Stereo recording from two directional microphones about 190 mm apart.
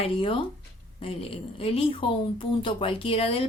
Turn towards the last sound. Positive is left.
turn(degrees=30)  # may be behind; listen again after turning